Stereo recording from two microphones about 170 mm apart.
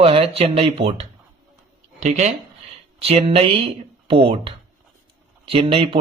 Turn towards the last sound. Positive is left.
turn(degrees=-30)  # may be behind; listen again after turning